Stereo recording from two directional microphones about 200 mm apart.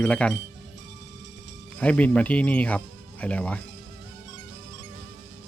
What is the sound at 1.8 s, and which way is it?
Speech, 5° left (ahead or behind).